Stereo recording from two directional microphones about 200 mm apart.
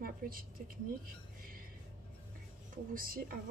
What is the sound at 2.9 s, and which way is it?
Speech, 45° right (ahead or behind).